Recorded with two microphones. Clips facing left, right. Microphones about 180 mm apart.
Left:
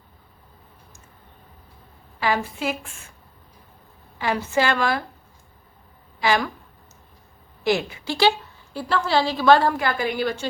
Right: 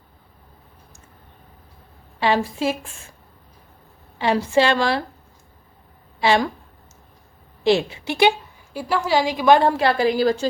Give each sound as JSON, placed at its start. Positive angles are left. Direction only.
{"t": 2.1, "sound": "a woman's voice", "side_deg": -25}
{"t": 4.5, "sound": "a woman's voice", "side_deg": -25}
{"t": 6.1, "sound": "a woman's voice", "side_deg": -25}
{"t": 7.6, "sound": "a woman's voice", "side_deg": -25}
{"t": 8.7, "sound": "a woman's voice", "side_deg": -10}